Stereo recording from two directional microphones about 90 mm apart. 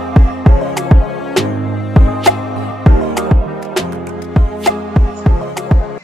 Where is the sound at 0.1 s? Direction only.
Centre (ahead or behind).